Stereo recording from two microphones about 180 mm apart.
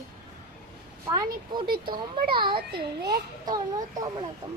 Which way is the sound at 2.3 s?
25° right (ahead or behind).